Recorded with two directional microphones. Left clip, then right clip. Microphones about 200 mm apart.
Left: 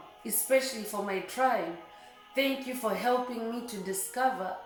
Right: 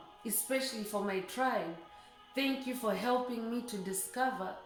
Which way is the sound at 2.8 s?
25° right (ahead or behind).